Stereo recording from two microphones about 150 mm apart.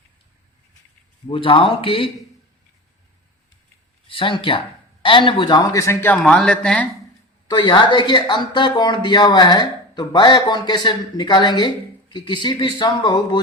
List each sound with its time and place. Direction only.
1.3 s speech: 35° left (ahead or behind)
4.1 s speech: 35° left (ahead or behind); by 6.1 s 15° left (ahead or behind)
6.2 s speech: 5° left (ahead or behind)
7.4 s speech: 30° left (ahead or behind)